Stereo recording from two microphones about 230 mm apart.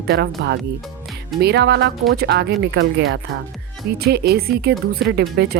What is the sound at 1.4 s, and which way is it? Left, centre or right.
A woman's voice, right.